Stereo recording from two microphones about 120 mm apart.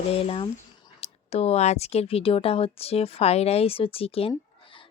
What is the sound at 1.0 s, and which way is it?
A woman's voice, 60° left (ahead or behind).